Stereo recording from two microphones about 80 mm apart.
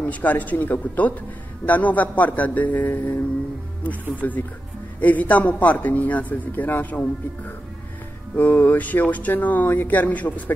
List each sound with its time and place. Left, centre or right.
0.0 s speech: centre
8.4 s speech: left